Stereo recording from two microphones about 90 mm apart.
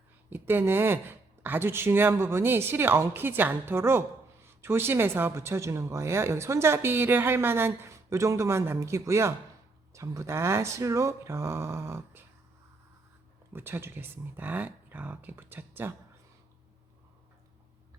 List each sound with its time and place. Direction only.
0.3 s speech: 20° right (ahead or behind)
13.5 s speech: 25° right (ahead or behind)